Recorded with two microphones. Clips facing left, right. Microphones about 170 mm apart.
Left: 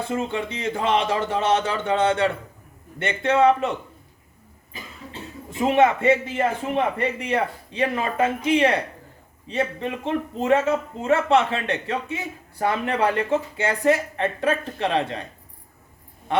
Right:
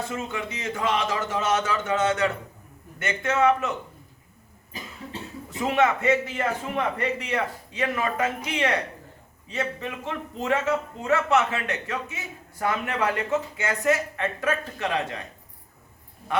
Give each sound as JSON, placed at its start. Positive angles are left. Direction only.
{"t": 0.1, "sound": "speech", "side_deg": 30}
{"t": 5.5, "sound": "speech", "side_deg": 25}